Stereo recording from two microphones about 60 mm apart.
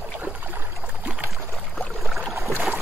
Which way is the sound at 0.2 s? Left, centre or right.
Right.